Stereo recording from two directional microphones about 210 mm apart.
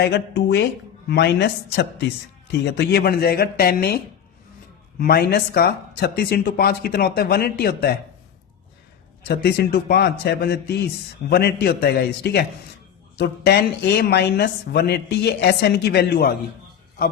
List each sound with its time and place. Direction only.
0.0 s speech: 55° left (ahead or behind)
9.2 s speech: 50° left (ahead or behind)